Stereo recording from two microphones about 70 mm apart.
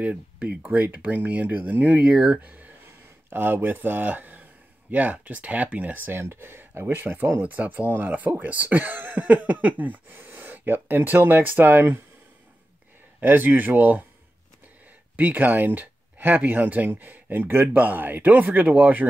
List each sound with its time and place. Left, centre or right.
0.0 s speech: right
13.2 s speech: right
15.1 s speech: right